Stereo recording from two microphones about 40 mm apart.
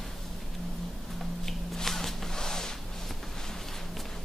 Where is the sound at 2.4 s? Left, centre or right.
Centre.